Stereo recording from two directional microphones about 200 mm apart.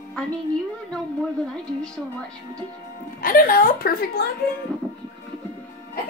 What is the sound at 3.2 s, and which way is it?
A woman's voice, 45° left (ahead or behind).